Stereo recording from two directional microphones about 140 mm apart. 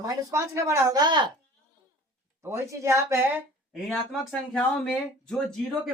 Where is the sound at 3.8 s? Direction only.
Centre (ahead or behind).